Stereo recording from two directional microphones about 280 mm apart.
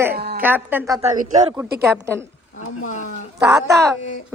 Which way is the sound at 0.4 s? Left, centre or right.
Centre.